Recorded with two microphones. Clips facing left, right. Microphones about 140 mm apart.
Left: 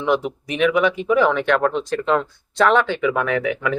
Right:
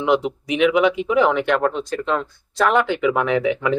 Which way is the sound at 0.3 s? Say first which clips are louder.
Right 2 dB; 15° right (ahead or behind).